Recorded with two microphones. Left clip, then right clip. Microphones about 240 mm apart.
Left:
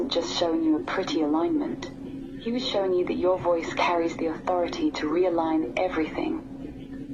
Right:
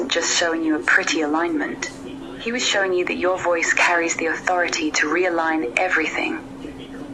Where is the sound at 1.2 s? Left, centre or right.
Right.